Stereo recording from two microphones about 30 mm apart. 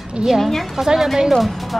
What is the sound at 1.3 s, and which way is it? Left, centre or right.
Speech, centre.